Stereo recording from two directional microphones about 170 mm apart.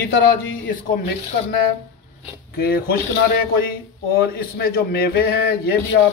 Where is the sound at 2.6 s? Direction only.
65° left (ahead or behind).